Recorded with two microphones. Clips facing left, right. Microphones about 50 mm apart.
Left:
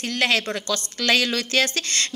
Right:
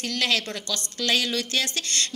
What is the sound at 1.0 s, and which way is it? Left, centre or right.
Speech, left.